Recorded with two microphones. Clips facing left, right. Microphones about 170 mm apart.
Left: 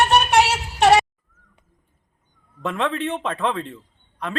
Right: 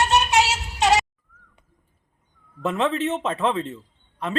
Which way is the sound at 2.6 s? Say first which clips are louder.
Right 1 dB; centre (ahead or behind).